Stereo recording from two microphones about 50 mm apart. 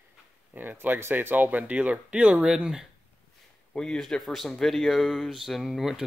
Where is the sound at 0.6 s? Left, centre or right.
Right; by 2.8 s centre.